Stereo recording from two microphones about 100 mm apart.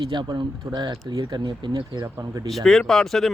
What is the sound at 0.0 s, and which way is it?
Speech, 50° right (ahead or behind).